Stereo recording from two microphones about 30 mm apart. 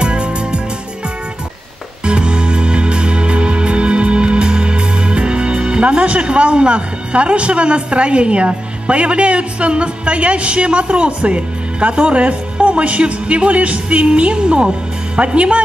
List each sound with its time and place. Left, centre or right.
0.0 s music: right
2.0 s music: right
15.1 s speech: right